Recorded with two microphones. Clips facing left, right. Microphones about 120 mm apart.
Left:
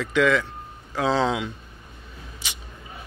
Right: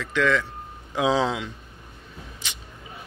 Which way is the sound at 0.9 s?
10° right (ahead or behind).